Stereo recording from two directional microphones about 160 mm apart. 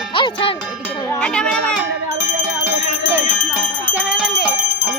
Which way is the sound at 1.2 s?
5° left (ahead or behind).